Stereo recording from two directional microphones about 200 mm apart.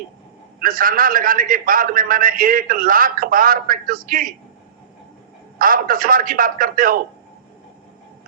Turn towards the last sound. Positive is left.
turn(degrees=-45)  # may be behind; listen again after turning